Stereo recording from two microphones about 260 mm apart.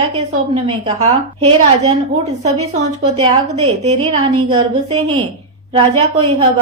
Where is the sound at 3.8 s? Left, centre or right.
Right.